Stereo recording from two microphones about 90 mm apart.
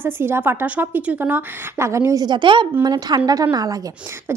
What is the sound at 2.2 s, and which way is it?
Speech, 60° right (ahead or behind).